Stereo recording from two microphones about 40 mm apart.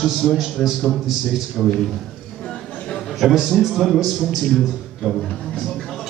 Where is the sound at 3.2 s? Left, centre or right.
Centre.